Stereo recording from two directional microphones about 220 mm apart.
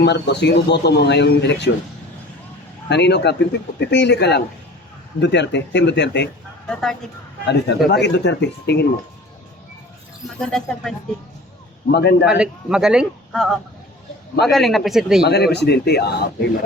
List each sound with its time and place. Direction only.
0.0 s a man's voice: 50° left (ahead or behind)
2.9 s a man's voice: 50° left (ahead or behind)
7.4 s a man's voice: 50° left (ahead or behind)
10.4 s a man's voice: centre (ahead or behind)
11.9 s a man's voice: 50° left (ahead or behind)
12.2 s a man's voice: 5° right (ahead or behind)
15.3 s a man's voice: 50° left (ahead or behind)